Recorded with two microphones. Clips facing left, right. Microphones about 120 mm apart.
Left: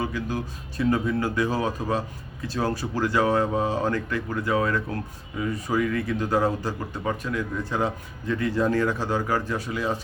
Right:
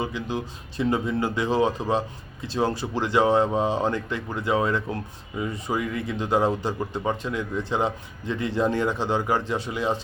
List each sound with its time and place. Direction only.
0.0 s speech: 25° right (ahead or behind)